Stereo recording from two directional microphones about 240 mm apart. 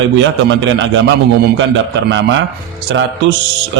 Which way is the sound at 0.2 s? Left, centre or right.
Right.